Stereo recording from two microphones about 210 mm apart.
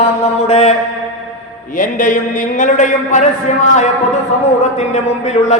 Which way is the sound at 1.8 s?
40° left (ahead or behind).